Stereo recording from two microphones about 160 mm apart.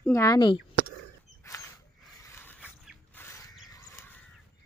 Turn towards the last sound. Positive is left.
turn(degrees=15)  # may be behind; listen again after turning